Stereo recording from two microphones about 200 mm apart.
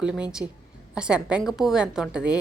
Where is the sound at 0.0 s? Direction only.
5° right (ahead or behind).